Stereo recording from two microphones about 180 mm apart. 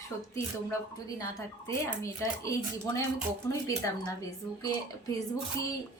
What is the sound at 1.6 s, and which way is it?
Speech, 15° left (ahead or behind).